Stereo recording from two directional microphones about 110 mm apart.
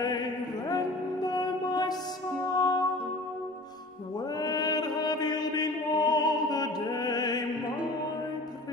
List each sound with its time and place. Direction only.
0.0 s mantra: 35° left (ahead or behind)
2.5 s music: 35° left (ahead or behind)
4.4 s chant: 35° left (ahead or behind)